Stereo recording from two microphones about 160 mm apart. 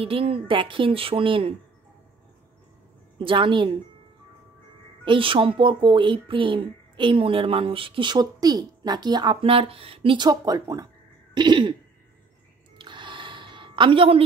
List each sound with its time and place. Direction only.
0.0 s speech: 35° right (ahead or behind)
3.2 s speech: 30° right (ahead or behind)
5.0 s speech: 30° right (ahead or behind)
11.3 s throat clearing: 30° right (ahead or behind)
12.7 s a sound: 30° right (ahead or behind)